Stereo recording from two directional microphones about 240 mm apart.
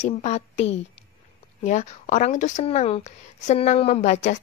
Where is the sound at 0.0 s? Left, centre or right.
Left.